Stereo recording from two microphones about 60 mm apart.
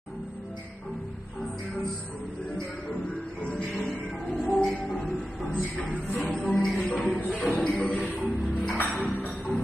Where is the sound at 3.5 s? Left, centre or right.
Centre.